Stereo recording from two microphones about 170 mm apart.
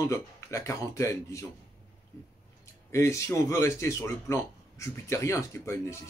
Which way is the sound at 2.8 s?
15° left (ahead or behind).